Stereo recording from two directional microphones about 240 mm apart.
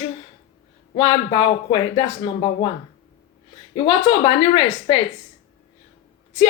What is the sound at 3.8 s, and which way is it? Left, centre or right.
Speech, centre.